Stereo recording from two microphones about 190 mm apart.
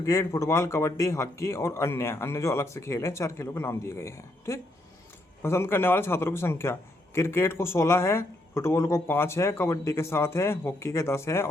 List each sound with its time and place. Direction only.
0.0 s a man's voice: 15° left (ahead or behind)